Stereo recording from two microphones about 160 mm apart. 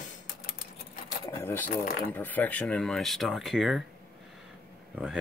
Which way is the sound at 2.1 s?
10° left (ahead or behind).